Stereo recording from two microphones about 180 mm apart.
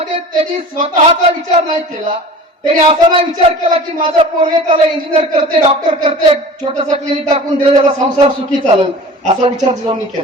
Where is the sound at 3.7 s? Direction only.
30° right (ahead or behind).